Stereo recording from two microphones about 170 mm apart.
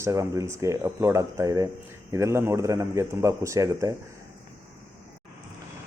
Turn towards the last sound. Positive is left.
turn(degrees=-20)  # may be behind; listen again after turning